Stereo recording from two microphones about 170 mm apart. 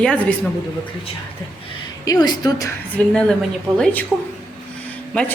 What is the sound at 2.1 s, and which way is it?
Speech, 25° left (ahead or behind).